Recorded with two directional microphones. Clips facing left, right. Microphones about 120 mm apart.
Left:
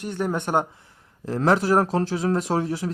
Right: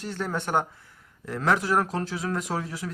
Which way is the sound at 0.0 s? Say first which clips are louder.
Left 4 dB; 15° left (ahead or behind).